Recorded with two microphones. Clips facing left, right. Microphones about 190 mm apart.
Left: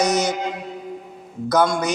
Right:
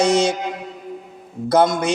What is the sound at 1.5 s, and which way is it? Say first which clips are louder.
Speech: right 3 dB; 25° right (ahead or behind).